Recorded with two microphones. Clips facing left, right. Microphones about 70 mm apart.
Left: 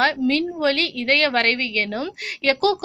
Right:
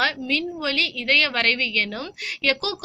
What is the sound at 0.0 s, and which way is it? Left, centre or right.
A woman's voice, left.